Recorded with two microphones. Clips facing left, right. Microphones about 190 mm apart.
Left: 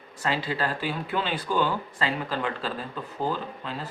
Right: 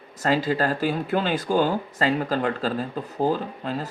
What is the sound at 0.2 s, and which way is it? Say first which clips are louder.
Speech: right 6 dB; 45° right (ahead or behind).